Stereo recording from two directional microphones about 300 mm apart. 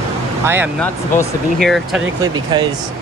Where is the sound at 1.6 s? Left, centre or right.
Centre.